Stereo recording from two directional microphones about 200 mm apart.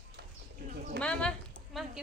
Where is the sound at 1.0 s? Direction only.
5° left (ahead or behind).